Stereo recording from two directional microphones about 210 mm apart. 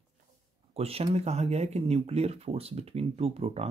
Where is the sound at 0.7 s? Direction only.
30° right (ahead or behind).